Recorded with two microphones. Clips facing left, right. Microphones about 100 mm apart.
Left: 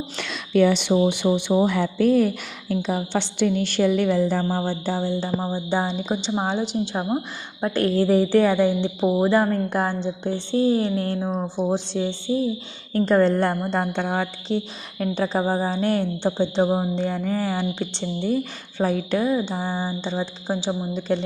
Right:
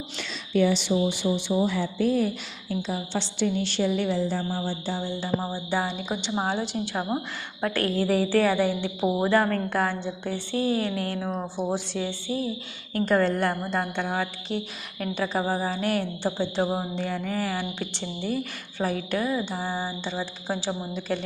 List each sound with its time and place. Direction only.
0.2 s speech: 65° left (ahead or behind); by 5.0 s 50° left (ahead or behind)
5.4 s a woman's voice: 20° left (ahead or behind)